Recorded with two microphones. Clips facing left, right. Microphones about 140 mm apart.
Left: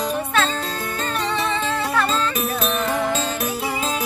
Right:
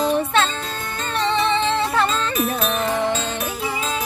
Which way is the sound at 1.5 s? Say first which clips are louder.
Right 3 dB; 25° right (ahead or behind).